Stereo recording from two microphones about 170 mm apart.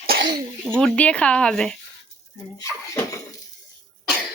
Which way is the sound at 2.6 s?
20° left (ahead or behind).